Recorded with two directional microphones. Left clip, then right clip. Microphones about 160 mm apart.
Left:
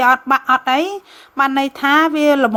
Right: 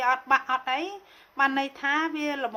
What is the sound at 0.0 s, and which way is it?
A woman's voice, 50° left (ahead or behind).